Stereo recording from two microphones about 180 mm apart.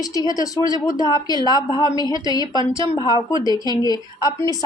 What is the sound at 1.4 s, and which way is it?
Speech, 20° right (ahead or behind).